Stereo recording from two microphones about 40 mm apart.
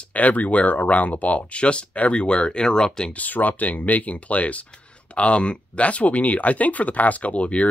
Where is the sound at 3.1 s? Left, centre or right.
Left.